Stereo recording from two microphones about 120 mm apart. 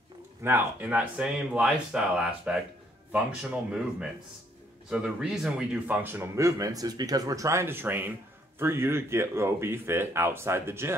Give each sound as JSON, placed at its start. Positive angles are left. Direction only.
{"t": 0.4, "sound": "speech", "side_deg": -20}
{"t": 5.9, "sound": "speech", "side_deg": -15}